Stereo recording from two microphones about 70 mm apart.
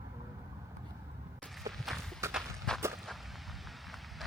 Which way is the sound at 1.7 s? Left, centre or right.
Centre.